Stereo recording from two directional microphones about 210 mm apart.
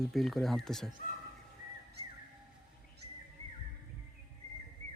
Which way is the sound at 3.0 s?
50° right (ahead or behind).